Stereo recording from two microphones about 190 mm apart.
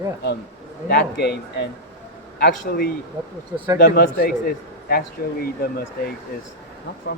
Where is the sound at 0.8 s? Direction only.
55° left (ahead or behind).